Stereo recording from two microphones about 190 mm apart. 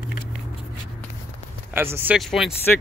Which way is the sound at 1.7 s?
10° right (ahead or behind).